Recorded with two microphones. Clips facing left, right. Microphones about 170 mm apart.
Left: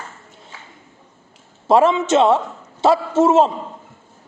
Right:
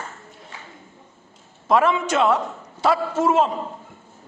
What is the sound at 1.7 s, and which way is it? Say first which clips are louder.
A man's voice: left 5 dB; 25° left (ahead or behind).